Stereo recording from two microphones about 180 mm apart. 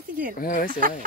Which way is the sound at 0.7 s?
50° right (ahead or behind).